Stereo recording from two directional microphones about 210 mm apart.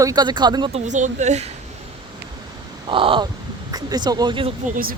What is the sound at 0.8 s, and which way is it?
Speech, 35° right (ahead or behind).